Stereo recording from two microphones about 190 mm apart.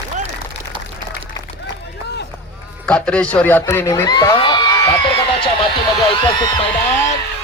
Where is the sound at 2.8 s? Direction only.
5° left (ahead or behind); by 4.9 s 25° left (ahead or behind).